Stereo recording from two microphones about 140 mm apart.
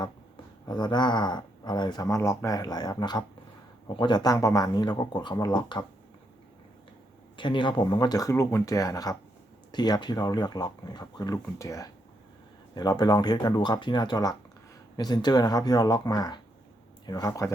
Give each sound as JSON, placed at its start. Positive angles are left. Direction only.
{"t": 0.6, "sound": "speech", "side_deg": 30}
{"t": 7.3, "sound": "speech", "side_deg": 35}